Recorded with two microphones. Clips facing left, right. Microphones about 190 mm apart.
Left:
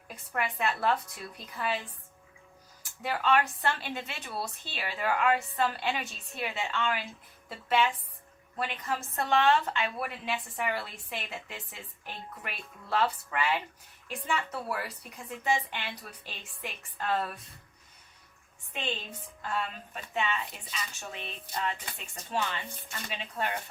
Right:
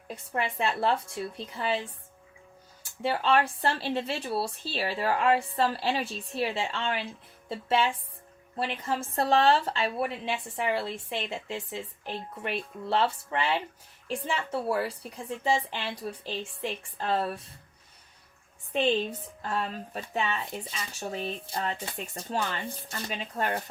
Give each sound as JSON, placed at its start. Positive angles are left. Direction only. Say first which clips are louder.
{"t": 0.3, "sound": "a woman's voice", "louder": "right 2 dB", "side_deg": -30}
{"t": 3.0, "sound": "a woman's voice", "louder": "right 2 dB", "side_deg": -30}
{"t": 19.4, "sound": "a woman's voice", "louder": "right 2 dB", "side_deg": -40}